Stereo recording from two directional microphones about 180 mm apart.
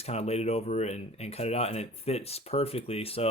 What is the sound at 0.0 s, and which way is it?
Speech, 35° left (ahead or behind).